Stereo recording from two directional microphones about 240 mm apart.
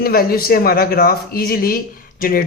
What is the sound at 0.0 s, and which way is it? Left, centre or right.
Speech, left.